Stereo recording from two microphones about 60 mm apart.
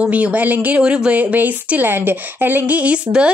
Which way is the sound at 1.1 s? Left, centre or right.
Right.